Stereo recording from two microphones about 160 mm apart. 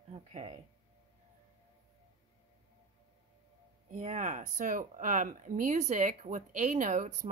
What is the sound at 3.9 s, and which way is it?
Speech, 50° right (ahead or behind).